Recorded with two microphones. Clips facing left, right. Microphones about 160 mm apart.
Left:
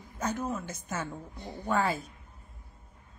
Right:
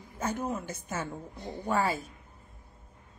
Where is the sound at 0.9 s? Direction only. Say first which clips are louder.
Even; 10° right (ahead or behind).